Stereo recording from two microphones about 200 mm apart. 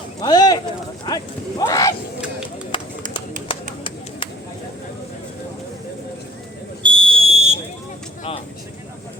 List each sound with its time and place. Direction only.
0.2 s a sound: 20° left (ahead or behind)
1.0 s speech: 20° left (ahead or behind)
2.7 s run: 25° left (ahead or behind)
3.5 s bird: 25° left (ahead or behind)
6.8 s fire alarm: 25° right (ahead or behind)